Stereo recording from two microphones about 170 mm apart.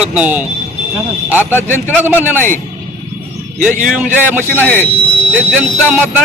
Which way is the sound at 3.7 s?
50° right (ahead or behind).